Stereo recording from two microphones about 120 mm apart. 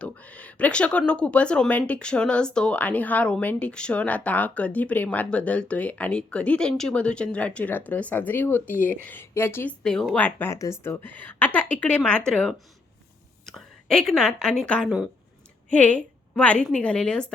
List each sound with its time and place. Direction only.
0.0 s speech: 10° left (ahead or behind)
9.8 s a woman's voice: 5° left (ahead or behind)